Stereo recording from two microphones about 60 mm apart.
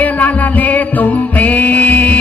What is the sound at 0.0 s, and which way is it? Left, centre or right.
Music, left.